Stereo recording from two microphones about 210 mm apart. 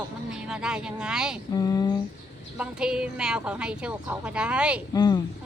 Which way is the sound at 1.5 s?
15° left (ahead or behind).